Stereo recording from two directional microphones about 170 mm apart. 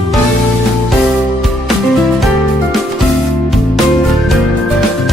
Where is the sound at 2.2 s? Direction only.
Centre (ahead or behind).